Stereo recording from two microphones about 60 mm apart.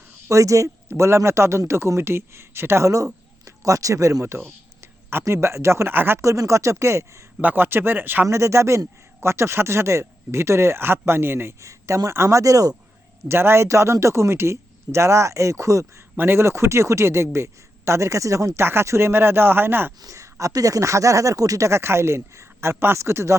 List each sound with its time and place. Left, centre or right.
0.3 s speech: right
0.9 s speech: right
2.8 s speech: right
5.9 s speech: right
6.2 s speech: right
7.4 s speech: right
8.3 s speech: right
11.6 s speech: right
13.2 s speech: right
16.1 s speech: right
18.6 s speech: right
20.0 s speech: right
21.7 s speech: right